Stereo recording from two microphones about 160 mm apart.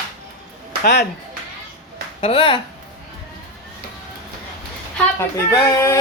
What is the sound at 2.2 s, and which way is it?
Speech, 35° left (ahead or behind).